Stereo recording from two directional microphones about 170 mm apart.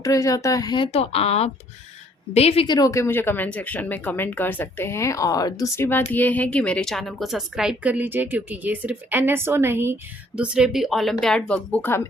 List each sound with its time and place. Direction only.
0.0 s a woman's voice: 20° left (ahead or behind)